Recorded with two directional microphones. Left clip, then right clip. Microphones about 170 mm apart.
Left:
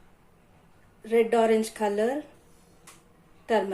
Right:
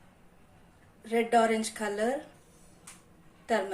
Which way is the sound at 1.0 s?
25° left (ahead or behind).